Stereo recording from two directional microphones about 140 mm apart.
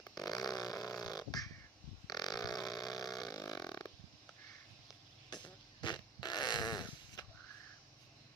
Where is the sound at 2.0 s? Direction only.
30° left (ahead or behind).